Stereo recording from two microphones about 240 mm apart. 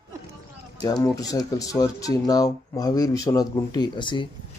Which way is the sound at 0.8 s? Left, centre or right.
Centre.